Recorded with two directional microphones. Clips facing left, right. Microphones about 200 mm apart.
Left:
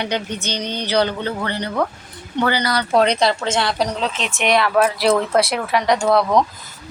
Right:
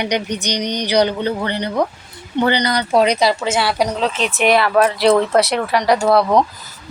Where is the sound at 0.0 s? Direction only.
15° right (ahead or behind).